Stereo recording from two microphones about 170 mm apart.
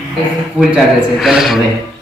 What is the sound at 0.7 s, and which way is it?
Speech, centre (ahead or behind).